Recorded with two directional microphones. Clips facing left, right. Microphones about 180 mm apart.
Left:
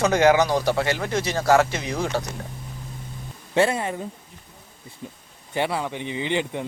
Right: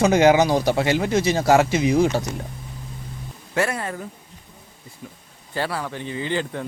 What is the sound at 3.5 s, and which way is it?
Speech, 25° left (ahead or behind).